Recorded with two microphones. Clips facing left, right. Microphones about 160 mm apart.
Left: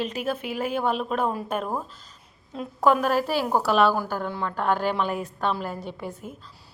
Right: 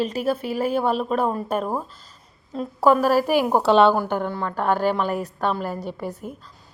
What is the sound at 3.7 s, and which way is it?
Speech, 30° right (ahead or behind).